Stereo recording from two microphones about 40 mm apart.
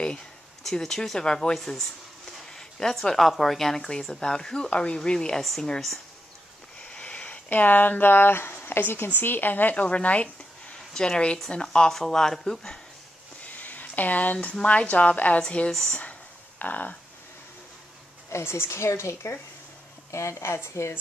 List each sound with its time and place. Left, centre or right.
0.7 s speech: centre
1.6 s speech: centre
4.6 s speech: left
5.4 s speech: centre
6.8 s sniff: left
7.4 s speech: left
9.8 s speech: left
10.9 s speech: centre
11.6 s a sound: centre
11.9 s speech: centre
13.5 s speech: left
16.0 s a sound: left
18.4 s speech: left
20.4 s speech: left